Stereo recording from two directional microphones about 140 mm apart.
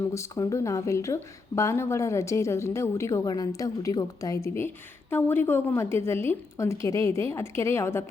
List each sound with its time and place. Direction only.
0.1 s a woman's voice: 20° left (ahead or behind)